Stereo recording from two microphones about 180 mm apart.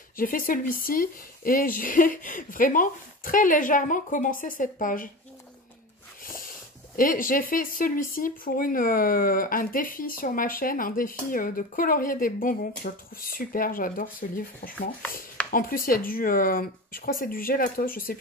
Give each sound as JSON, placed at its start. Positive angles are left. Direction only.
{"t": 0.2, "sound": "speech", "side_deg": 50}
{"t": 6.2, "sound": "a sound", "side_deg": 50}
{"t": 7.0, "sound": "speech", "side_deg": 50}